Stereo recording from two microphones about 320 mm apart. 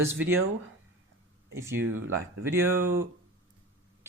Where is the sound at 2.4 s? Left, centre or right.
Centre.